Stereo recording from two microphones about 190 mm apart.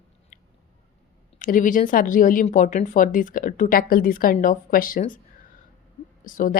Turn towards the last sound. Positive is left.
turn(degrees=45)  # may be behind; listen again after turning